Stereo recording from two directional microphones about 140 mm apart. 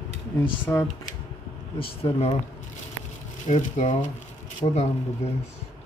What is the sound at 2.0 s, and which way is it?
Speech, 50° left (ahead or behind).